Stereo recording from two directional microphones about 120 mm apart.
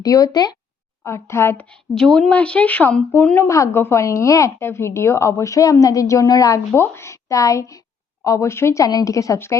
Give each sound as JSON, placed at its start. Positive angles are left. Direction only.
{"t": 0.0, "sound": "a woman's voice", "side_deg": 30}
{"t": 2.0, "sound": "a woman's voice", "side_deg": 5}